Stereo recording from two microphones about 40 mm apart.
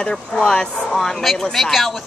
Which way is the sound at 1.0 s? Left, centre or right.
Centre.